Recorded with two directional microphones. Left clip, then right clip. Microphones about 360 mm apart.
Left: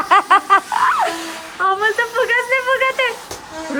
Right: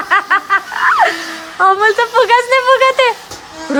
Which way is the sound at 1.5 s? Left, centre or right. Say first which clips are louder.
Right 6 dB; centre.